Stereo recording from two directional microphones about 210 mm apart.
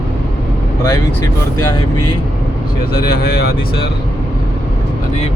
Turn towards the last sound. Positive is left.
turn(degrees=50)  # may be behind; listen again after turning